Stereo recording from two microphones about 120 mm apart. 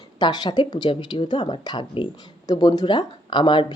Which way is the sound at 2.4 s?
30° left (ahead or behind).